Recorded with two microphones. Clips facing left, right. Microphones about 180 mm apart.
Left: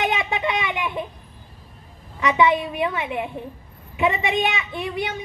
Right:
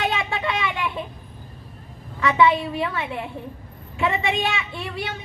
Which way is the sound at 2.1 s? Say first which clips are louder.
Even; 20° left (ahead or behind).